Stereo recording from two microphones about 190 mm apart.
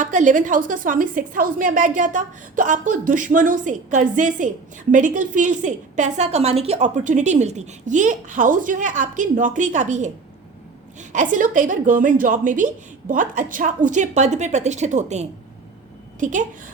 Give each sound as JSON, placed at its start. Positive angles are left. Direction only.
{"t": 0.0, "sound": "a woman's voice", "side_deg": -40}
{"t": 11.1, "sound": "a woman's voice", "side_deg": -40}